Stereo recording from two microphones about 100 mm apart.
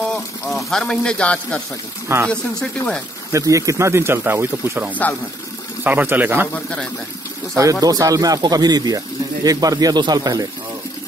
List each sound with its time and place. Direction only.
0.0 s a man's voice: 5° left (ahead or behind)
2.0 s speech: 25° right (ahead or behind)
6.5 s a man's voice: 10° left (ahead or behind)
7.8 s speech: 35° right (ahead or behind)